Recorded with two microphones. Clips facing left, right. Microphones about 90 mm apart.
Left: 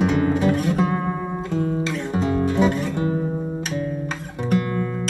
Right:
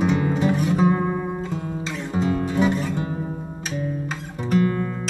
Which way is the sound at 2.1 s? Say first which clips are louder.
Left 1 dB; 5° right (ahead or behind).